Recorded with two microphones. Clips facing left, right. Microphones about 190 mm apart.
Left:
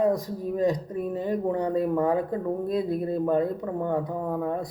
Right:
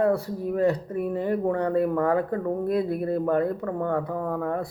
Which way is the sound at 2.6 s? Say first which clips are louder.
Right 1 dB; 60° right (ahead or behind).